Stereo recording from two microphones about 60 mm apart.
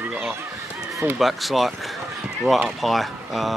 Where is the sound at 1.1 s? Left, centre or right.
Centre.